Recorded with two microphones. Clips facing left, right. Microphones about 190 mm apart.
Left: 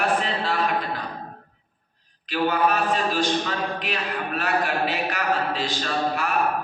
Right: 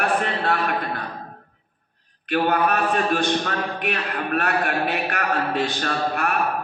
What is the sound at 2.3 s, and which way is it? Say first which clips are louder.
A man's voice: right 2 dB; 55° right (ahead or behind).